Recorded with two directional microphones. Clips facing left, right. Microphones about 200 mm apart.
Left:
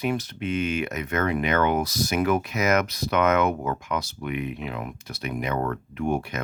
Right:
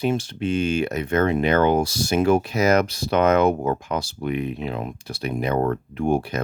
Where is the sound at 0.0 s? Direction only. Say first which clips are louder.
Right 4 dB; 30° right (ahead or behind).